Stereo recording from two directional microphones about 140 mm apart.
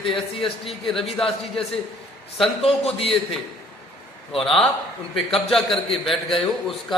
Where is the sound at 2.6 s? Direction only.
45° left (ahead or behind).